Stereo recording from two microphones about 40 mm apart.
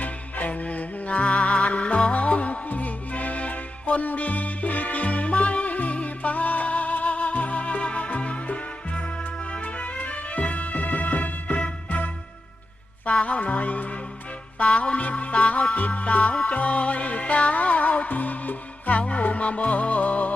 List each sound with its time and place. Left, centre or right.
0.0 s music: left